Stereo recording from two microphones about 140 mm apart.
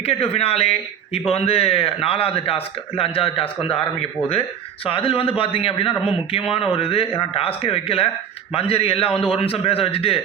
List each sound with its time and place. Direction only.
0.0 s a man's voice: 45° left (ahead or behind)
4.9 s a man's voice: 40° left (ahead or behind)